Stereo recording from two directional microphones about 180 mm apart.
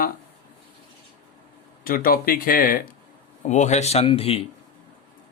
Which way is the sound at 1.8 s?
55° left (ahead or behind).